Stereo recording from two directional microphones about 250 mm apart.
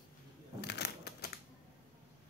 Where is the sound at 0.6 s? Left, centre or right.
Left.